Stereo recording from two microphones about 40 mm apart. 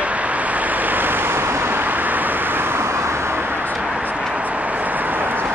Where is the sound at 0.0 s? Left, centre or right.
Right.